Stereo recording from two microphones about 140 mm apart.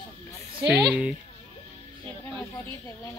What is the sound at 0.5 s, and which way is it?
Speech, 5° right (ahead or behind).